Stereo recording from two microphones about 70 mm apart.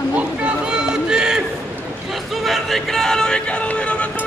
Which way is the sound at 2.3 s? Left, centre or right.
Centre.